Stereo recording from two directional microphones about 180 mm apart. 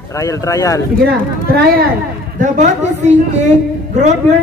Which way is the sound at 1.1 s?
60° right (ahead or behind).